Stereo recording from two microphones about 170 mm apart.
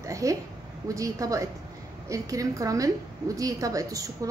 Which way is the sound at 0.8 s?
20° right (ahead or behind).